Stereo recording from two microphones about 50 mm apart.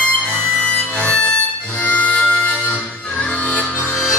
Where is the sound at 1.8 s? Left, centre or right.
Left.